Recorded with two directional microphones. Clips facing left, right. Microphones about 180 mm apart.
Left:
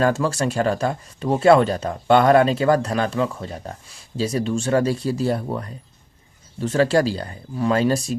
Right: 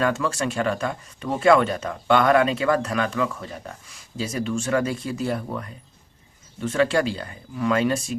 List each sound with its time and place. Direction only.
0.0 s speech: 35° left (ahead or behind)